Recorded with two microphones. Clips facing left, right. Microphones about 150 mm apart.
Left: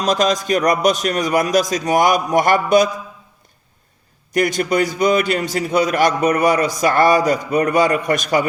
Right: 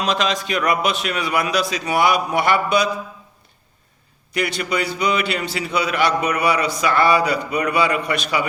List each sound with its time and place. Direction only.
0.0 s a man's voice: 45° left (ahead or behind)
4.3 s a man's voice: 45° left (ahead or behind)